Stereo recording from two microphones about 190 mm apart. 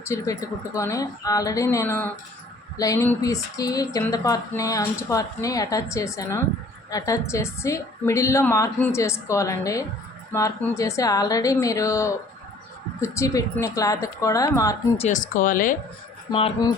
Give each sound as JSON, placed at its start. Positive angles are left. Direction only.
{"t": 0.1, "sound": "speech", "side_deg": 15}
{"t": 14.9, "sound": "speech", "side_deg": 40}
{"t": 16.3, "sound": "speech", "side_deg": 25}